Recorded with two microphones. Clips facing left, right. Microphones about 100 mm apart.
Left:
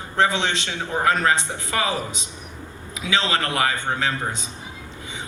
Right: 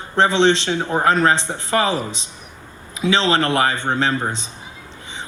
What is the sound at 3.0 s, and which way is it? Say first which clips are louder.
A man's voice: right 6 dB; 30° right (ahead or behind).